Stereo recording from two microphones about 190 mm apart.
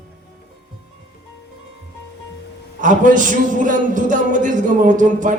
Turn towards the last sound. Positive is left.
turn(degrees=-40)  # may be behind; listen again after turning